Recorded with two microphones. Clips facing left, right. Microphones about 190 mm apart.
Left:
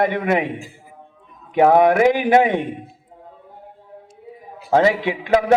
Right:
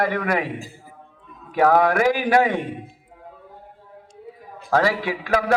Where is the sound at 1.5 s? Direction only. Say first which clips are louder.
Left 4 dB; 20° left (ahead or behind).